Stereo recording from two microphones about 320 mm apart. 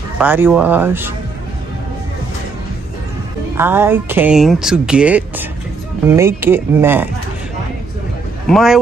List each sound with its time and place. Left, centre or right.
0.2 s speech: centre
3.5 s speech: centre
8.5 s speech: centre